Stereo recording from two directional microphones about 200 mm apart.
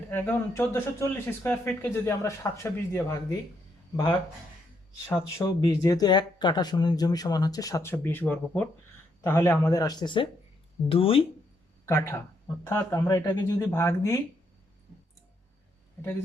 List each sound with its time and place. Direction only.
0.1 s speech: 10° left (ahead or behind)
5.0 s speech: 15° left (ahead or behind)
11.9 s speech: 10° left (ahead or behind)